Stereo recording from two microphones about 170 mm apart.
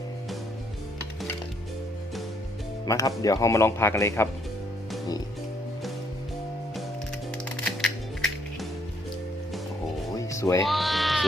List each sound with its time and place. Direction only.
2.8 s speech: 20° left (ahead or behind)
7.6 s music: 5° left (ahead or behind)
10.2 s music: 20° left (ahead or behind)
10.6 s bleat: centre (ahead or behind)